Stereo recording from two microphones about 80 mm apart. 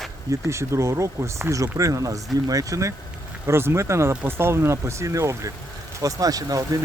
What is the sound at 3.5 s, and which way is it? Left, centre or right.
Speech, right.